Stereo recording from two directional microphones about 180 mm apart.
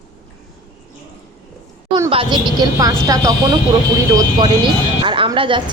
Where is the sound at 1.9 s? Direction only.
30° right (ahead or behind).